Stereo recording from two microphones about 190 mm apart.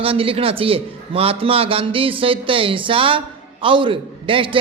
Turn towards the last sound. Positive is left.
turn(degrees=-25)  # may be behind; listen again after turning